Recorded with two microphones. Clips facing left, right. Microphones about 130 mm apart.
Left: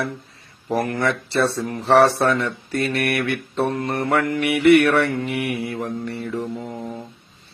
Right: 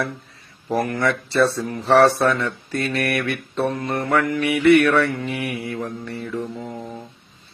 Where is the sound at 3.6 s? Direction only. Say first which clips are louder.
Left 1 dB; 30° left (ahead or behind).